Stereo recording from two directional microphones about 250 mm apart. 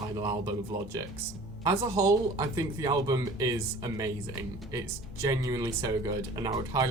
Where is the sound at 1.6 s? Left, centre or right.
Centre.